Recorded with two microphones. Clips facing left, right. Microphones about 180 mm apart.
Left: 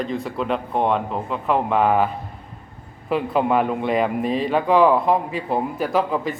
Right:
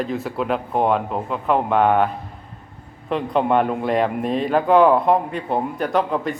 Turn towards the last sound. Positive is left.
turn(degrees=0)  # may be behind; listen again after turning